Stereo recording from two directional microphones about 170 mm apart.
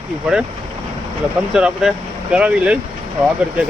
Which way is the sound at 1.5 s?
5° right (ahead or behind).